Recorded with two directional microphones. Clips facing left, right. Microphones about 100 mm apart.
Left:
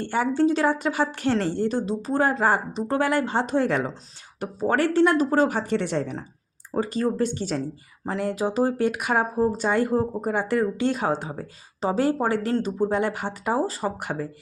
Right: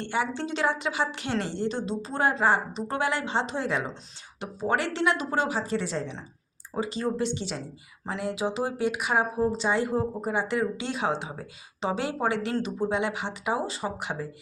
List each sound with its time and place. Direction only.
0.0 s speech: 45° left (ahead or behind)
4.4 s a woman's voice: 45° left (ahead or behind)
5.5 s a woman's voice: 60° left (ahead or behind)
6.7 s a woman's voice: 45° left (ahead or behind)